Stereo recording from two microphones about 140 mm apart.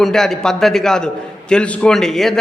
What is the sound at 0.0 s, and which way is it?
A man's voice, centre (ahead or behind).